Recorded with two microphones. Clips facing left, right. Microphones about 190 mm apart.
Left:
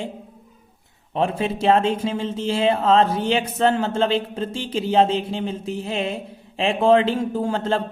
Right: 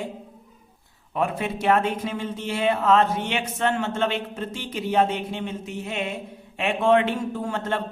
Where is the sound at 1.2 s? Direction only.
30° left (ahead or behind).